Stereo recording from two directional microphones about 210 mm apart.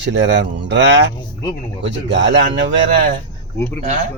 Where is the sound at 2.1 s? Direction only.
60° right (ahead or behind).